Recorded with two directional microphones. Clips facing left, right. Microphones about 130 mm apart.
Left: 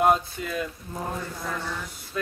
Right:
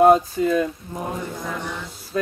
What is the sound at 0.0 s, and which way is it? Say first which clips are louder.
Speech: right 8 dB; 35° right (ahead or behind).